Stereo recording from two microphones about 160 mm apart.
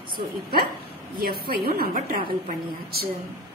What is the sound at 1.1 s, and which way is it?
A woman's voice, 70° right (ahead or behind).